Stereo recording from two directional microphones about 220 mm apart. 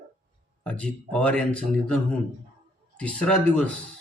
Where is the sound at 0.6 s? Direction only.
5° left (ahead or behind).